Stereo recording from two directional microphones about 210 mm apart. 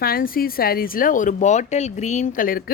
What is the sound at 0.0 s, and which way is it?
Speech, 45° left (ahead or behind).